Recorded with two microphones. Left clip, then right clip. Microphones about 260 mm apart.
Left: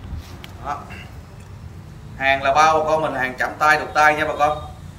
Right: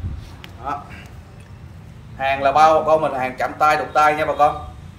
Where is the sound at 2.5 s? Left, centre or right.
Right.